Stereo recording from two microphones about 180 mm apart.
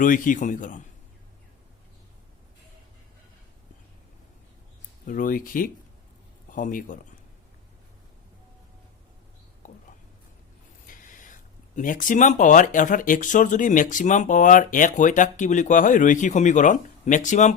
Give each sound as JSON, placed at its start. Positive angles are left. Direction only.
{"t": 0.0, "sound": "speech", "side_deg": 45}
{"t": 5.0, "sound": "speech", "side_deg": 50}
{"t": 10.8, "sound": "speech", "side_deg": 50}